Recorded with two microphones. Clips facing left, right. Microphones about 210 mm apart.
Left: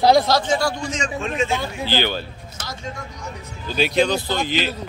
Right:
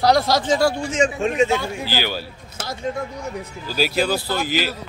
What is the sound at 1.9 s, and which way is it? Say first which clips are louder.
Speech: left 5 dB; 5° right (ahead or behind).